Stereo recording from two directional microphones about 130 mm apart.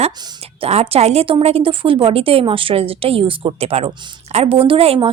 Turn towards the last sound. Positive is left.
turn(degrees=-45)  # may be behind; listen again after turning